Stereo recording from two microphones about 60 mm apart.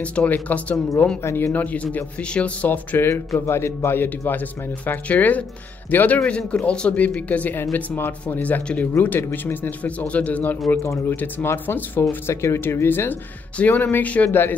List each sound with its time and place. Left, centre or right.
0.0 s speech: left
1.2 s speech: left
1.5 s speech: left
3.3 s a man's voice: left
4.8 s speech: left
7.7 s speech: left
8.4 s speech: left
9.8 s speech: left
12.3 s speech: left
13.6 s speech: left